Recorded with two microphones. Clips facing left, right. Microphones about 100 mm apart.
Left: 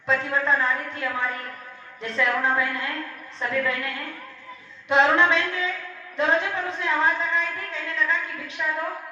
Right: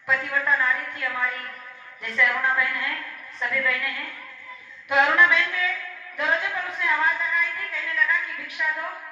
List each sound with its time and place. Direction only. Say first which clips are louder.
0.1 s a woman's voice: left 2 dB; 25° left (ahead or behind)